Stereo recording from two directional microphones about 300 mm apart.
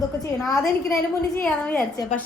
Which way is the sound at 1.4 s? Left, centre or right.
Centre.